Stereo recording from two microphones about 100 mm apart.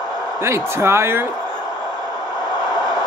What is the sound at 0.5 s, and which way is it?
Speech, 25° right (ahead or behind).